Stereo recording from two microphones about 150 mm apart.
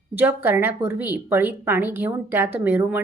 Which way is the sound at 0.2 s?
15° right (ahead or behind).